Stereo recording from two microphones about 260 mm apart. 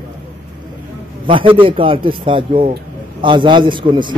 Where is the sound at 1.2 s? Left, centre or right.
Centre.